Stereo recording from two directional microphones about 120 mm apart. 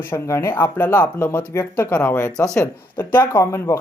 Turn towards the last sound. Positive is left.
turn(degrees=25)  # may be behind; listen again after turning